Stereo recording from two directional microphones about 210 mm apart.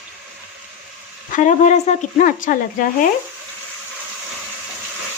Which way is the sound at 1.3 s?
35° left (ahead or behind).